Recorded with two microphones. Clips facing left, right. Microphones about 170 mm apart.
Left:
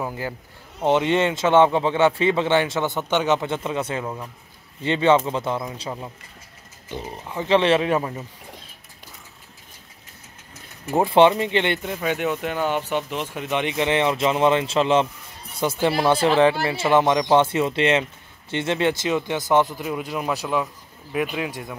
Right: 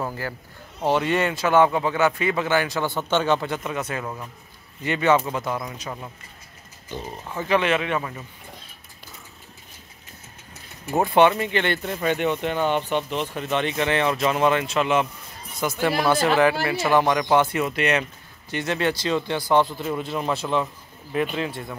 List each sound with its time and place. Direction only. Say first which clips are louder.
0.7 s a man's voice: left 2 dB; 20° left (ahead or behind)
4.0 s speech: left 2 dB; 10° left (ahead or behind)
4.8 s a man's voice: left 2 dB; 25° left (ahead or behind)
11.1 s a man's voice: left 2 dB; 25° left (ahead or behind)
11.9 s a man's voice: right 1 dB; 5° left (ahead or behind)